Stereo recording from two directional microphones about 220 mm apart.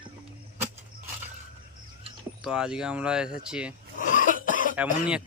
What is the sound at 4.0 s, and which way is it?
Cough, 35° left (ahead or behind).